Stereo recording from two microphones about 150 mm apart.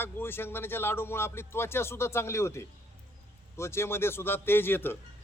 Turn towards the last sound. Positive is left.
turn(degrees=15)  # may be behind; listen again after turning